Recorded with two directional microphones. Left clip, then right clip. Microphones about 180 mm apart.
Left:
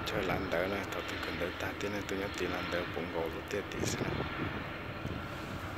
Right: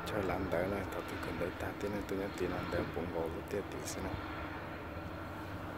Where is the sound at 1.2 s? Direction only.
60° right (ahead or behind).